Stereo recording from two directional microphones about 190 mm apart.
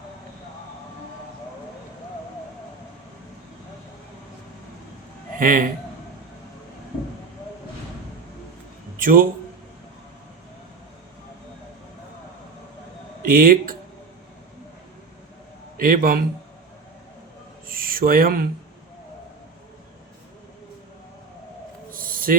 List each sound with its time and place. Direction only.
5.4 s a man's voice: 45° right (ahead or behind)
9.0 s a sound: 45° right (ahead or behind)
13.3 s speech: 50° right (ahead or behind)
15.8 s speech: 50° right (ahead or behind)
17.7 s a sound: 50° right (ahead or behind)
21.9 s owl: 45° right (ahead or behind)